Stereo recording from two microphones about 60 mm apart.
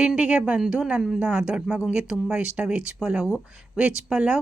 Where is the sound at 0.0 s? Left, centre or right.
Centre.